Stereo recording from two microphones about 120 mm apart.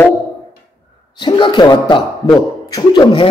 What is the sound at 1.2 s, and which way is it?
A man's voice, 40° left (ahead or behind).